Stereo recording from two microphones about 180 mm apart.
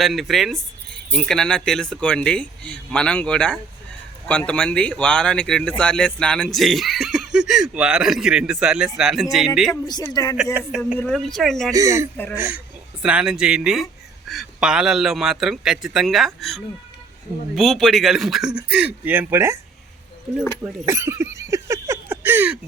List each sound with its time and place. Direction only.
0.0 s speech: centre (ahead or behind)
9.8 s a man's voice: 20° left (ahead or behind)
10.3 s speech: 5° right (ahead or behind)
11.7 s speech: 15° right (ahead or behind)
12.1 s speech: 10° left (ahead or behind)
13.0 s speech: 5° right (ahead or behind)
20.8 s a sound: 15° right (ahead or behind)